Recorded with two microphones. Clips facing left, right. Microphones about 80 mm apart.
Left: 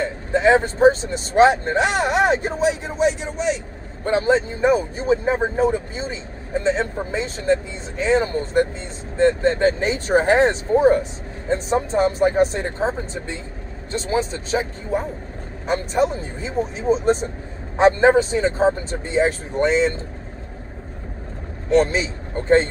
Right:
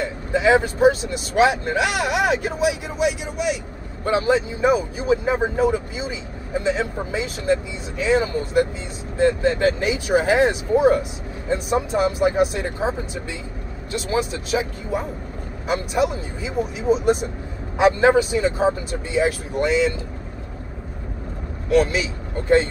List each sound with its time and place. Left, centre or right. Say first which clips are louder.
0.0 s speech: left 2 dB; left
12.7 s speech: left 1 dB; centre
13.9 s speech: left 1 dB; left
21.6 s speech: left 1 dB; left